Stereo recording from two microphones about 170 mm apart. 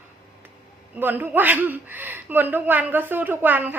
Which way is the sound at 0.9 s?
10° right (ahead or behind).